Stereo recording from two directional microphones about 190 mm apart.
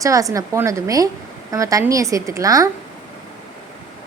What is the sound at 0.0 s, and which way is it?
Speech, 15° right (ahead or behind).